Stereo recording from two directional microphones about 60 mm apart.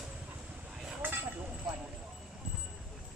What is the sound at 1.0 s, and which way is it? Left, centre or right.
Vehicle, right.